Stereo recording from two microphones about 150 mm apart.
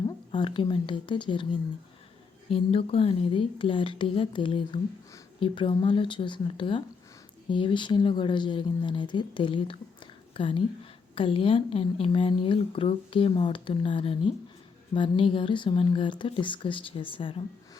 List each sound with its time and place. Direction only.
0.0 s speech: 30° left (ahead or behind)
2.5 s a woman's voice: 40° left (ahead or behind)